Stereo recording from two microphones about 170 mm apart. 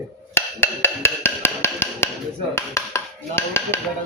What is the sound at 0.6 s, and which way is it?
Wood block, 15° left (ahead or behind).